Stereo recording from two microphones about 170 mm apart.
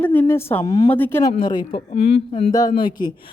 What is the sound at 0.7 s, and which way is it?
Speech, 25° left (ahead or behind).